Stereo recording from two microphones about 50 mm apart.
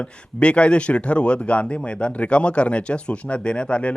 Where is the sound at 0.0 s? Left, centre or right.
Left.